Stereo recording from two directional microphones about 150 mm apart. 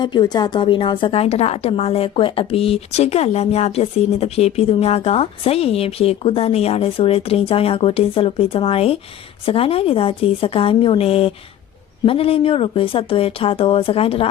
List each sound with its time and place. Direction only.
0.0 s a woman's voice: 30° left (ahead or behind)